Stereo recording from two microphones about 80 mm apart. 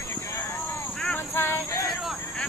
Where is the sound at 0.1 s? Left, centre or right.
Left.